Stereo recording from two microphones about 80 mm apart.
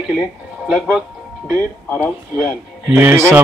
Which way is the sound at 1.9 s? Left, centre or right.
Centre.